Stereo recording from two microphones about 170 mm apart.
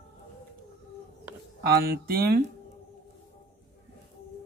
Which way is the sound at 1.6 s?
65° right (ahead or behind).